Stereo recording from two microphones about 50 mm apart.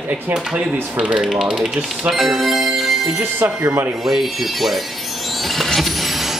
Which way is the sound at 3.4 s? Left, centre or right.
Right.